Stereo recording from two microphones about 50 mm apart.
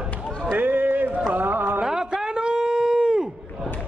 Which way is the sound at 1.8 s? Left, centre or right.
Centre.